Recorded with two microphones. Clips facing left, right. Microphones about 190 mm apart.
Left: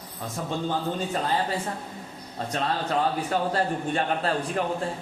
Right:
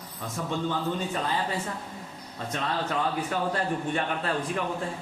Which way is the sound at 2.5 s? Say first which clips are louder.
Left 3 dB; 35° left (ahead or behind).